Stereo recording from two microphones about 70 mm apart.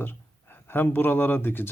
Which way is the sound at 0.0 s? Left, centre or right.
Left.